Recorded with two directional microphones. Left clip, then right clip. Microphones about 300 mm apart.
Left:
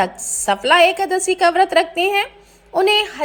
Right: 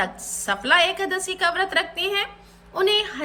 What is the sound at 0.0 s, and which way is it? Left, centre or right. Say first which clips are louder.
A woman's voice: left 7 dB; centre.